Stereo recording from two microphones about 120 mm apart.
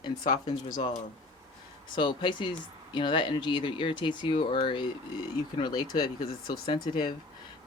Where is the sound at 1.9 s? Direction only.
40° left (ahead or behind).